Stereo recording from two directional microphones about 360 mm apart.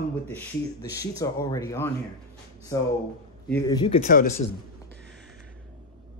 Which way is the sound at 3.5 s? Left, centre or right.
Centre.